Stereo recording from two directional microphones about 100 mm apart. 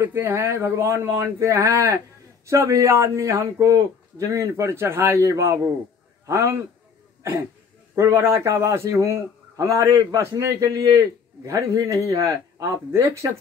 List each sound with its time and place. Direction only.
0.0 s a man's voice: 25° right (ahead or behind)
7.9 s a man's voice: 30° right (ahead or behind)